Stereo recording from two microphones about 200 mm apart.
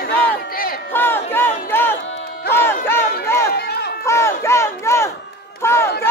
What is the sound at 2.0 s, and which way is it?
Music, 65° left (ahead or behind).